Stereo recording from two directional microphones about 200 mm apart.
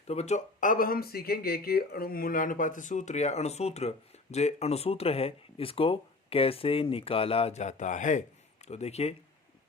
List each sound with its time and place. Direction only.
0.1 s speech: 35° left (ahead or behind)